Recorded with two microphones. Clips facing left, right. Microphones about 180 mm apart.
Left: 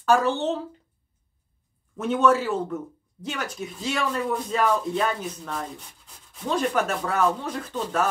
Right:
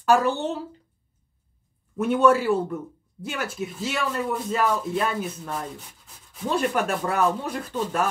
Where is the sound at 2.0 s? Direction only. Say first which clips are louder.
Right 2 dB; 10° right (ahead or behind).